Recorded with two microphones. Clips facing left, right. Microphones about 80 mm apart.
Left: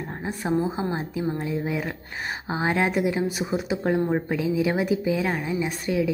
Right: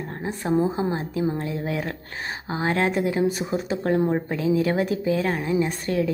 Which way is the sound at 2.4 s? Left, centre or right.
Centre.